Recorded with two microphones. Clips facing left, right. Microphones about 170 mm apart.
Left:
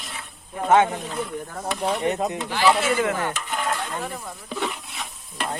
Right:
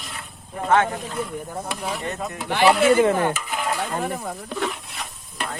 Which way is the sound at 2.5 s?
60° right (ahead or behind).